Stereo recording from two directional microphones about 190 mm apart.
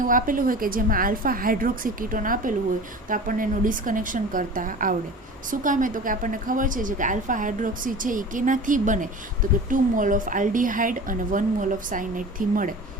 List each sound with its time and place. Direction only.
0.0 s a woman's voice: 45° right (ahead or behind)